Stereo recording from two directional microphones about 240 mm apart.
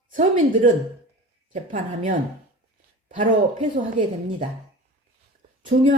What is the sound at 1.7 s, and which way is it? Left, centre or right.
Speech, right.